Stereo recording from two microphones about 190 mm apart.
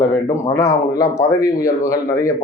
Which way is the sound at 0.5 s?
15° left (ahead or behind).